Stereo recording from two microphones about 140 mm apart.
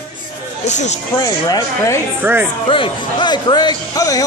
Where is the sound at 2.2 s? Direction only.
15° right (ahead or behind).